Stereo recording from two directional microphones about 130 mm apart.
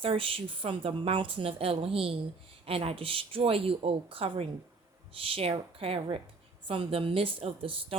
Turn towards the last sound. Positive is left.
turn(degrees=-45)  # may be behind; listen again after turning